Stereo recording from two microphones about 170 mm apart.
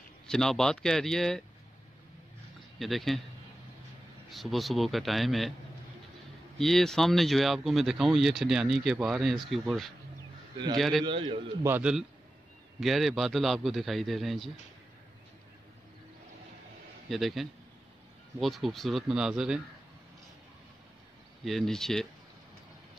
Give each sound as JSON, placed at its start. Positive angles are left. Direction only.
{"t": 0.3, "sound": "speech", "side_deg": 5}
{"t": 2.8, "sound": "speech", "side_deg": 0}
{"t": 4.3, "sound": "speech", "side_deg": 0}
{"t": 6.6, "sound": "speech", "side_deg": 0}
{"t": 11.1, "sound": "a man's voice", "side_deg": -30}
{"t": 11.6, "sound": "a man's voice", "side_deg": -10}
{"t": 17.1, "sound": "speech", "side_deg": 0}
{"t": 21.5, "sound": "speech", "side_deg": 0}